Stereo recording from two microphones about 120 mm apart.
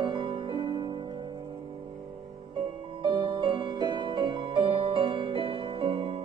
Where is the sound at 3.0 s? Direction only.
40° right (ahead or behind).